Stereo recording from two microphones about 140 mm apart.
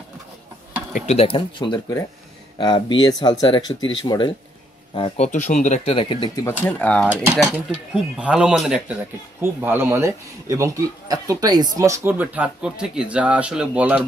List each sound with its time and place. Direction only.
1.0 s speech: 45° left (ahead or behind)
5.2 s speech: 60° left (ahead or behind)
5.9 s speech: 40° left (ahead or behind)
6.6 s speech: 10° left (ahead or behind)
7.7 s speech: 10° right (ahead or behind)
9.4 s speech: 15° right (ahead or behind)